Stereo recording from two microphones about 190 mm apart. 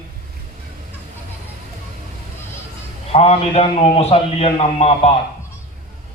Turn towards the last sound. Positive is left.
turn(degrees=35)  # may be behind; listen again after turning